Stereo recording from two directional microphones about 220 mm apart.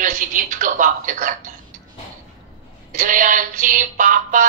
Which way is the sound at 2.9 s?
35° right (ahead or behind).